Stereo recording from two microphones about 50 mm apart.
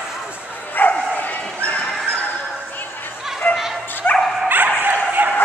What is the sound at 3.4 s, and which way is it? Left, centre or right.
Music, left.